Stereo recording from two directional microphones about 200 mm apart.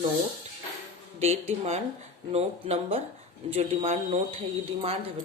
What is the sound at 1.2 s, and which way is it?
Speech, 30° right (ahead or behind).